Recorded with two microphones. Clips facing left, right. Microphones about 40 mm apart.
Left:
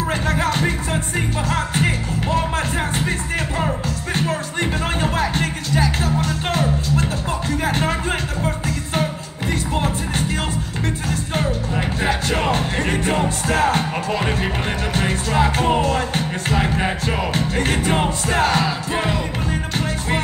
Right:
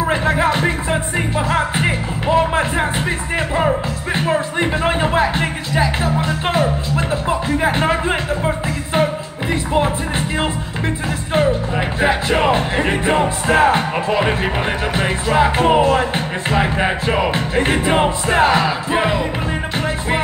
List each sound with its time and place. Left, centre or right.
0.0 s music: right
3.5 s speech: right
6.1 s music: right
11.3 s music: right